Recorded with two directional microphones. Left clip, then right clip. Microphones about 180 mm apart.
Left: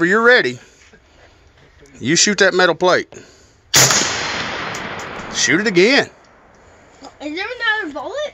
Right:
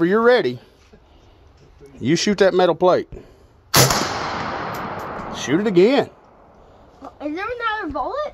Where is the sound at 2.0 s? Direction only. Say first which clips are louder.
Left 3 dB; 10° right (ahead or behind).